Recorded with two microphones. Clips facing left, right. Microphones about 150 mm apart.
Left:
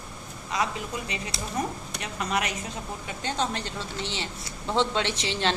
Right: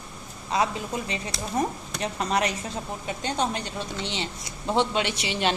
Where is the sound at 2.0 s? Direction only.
30° right (ahead or behind).